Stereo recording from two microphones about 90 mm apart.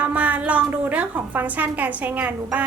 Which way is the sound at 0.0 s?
15° right (ahead or behind).